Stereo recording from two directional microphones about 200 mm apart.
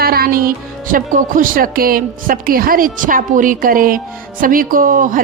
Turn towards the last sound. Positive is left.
turn(degrees=-40)  # may be behind; listen again after turning